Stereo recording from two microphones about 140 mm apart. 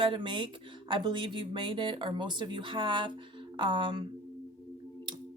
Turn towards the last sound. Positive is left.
turn(degrees=-35)  # may be behind; listen again after turning